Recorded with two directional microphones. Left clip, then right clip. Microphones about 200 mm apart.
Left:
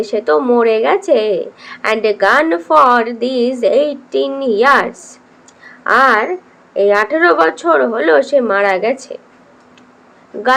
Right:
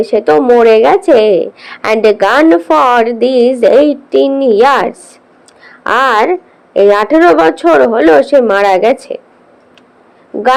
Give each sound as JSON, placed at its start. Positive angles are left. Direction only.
{"t": 0.0, "sound": "a woman's voice", "side_deg": -30}